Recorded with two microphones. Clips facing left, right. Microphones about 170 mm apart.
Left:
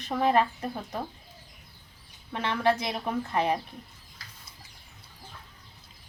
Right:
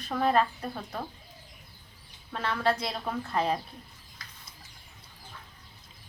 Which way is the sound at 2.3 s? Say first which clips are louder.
Left 2 dB; 20° left (ahead or behind).